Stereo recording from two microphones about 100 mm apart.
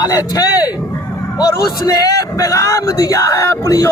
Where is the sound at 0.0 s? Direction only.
35° left (ahead or behind).